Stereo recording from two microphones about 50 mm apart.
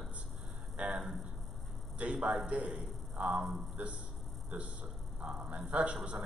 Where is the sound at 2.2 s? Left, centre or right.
Right.